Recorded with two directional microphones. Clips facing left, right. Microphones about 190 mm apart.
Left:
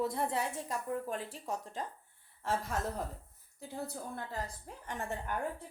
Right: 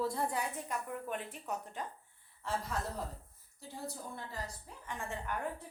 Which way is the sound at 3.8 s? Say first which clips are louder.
Left 1 dB; 60° left (ahead or behind).